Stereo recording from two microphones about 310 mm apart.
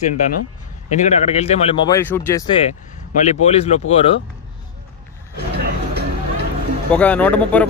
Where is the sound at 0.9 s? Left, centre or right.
Left.